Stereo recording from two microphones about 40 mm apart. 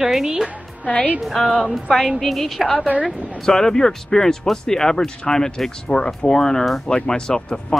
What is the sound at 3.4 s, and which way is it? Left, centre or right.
Speech, centre.